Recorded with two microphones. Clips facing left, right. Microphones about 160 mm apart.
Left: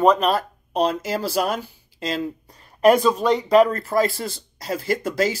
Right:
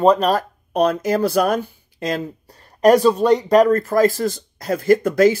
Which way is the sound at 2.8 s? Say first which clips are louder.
Right 3 dB; 40° right (ahead or behind).